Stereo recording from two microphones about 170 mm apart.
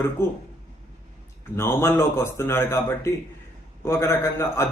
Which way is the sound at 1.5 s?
15° left (ahead or behind).